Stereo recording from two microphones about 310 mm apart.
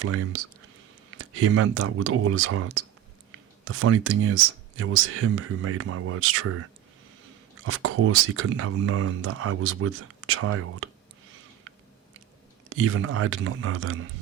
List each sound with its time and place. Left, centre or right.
0.0 s speech: right
7.6 s speech: right
12.7 s speech: right